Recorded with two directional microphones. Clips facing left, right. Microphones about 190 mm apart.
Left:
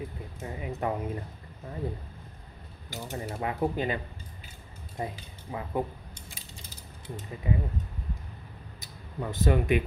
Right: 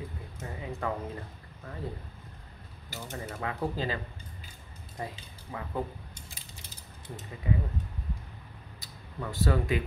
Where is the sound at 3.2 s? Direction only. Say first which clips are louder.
Left 4 dB; 25° left (ahead or behind).